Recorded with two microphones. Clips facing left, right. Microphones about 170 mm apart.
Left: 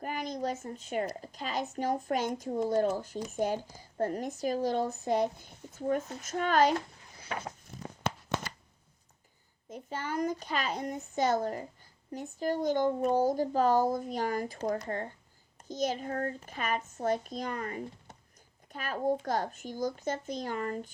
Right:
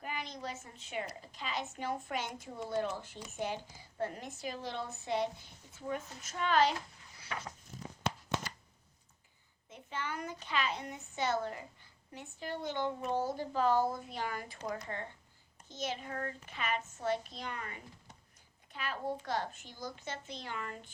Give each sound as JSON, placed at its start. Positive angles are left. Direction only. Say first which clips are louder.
{"t": 0.0, "sound": "a child's voice", "louder": "left 8 dB", "side_deg": 45}
{"t": 7.2, "sound": "a sound", "louder": "left 5 dB", "side_deg": 50}
{"t": 9.6, "sound": "speech", "louder": "left 4 dB", "side_deg": 40}